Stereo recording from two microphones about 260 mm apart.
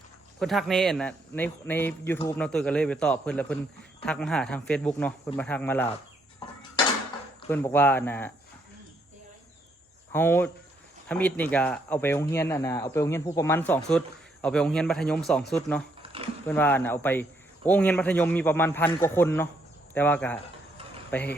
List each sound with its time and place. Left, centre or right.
0.3 s speech: centre
7.4 s speech: centre
10.1 s speech: centre
16.0 s a sound: right
16.5 s speech: centre